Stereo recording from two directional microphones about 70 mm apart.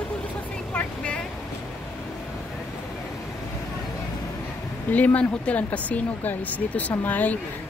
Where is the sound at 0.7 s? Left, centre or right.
Centre.